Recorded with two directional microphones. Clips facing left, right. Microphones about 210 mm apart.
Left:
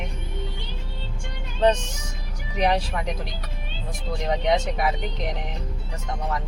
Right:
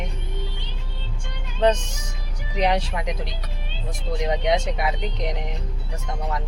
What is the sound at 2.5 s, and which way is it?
Speech, 15° right (ahead or behind).